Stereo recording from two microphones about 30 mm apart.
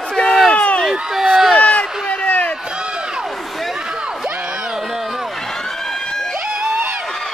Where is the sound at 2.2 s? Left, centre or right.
Left.